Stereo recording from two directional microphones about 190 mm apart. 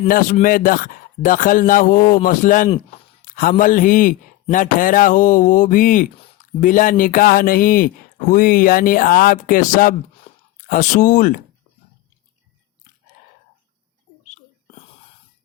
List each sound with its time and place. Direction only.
0.1 s a man's voice: 45° left (ahead or behind)
3.2 s a sound: 45° left (ahead or behind)
3.6 s a man's voice: 45° left (ahead or behind)